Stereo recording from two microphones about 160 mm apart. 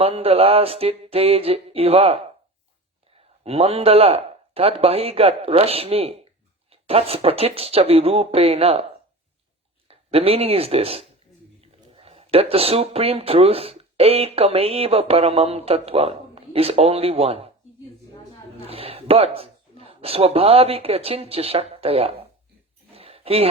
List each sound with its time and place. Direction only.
0.0 s a man's voice: 40° right (ahead or behind)
3.4 s a man's voice: 40° right (ahead or behind)
9.9 s speech: 35° right (ahead or behind)
18.7 s speech: 35° right (ahead or behind)
22.9 s a sound: 40° right (ahead or behind)